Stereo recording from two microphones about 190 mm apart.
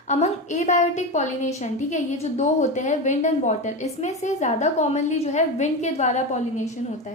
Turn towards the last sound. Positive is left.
turn(degrees=40)  # may be behind; listen again after turning